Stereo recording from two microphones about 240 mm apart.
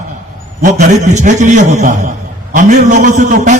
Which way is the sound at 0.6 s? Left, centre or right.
Right.